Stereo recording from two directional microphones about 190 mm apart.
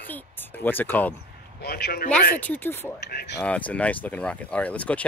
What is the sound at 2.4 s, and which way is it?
Speech, 10° left (ahead or behind).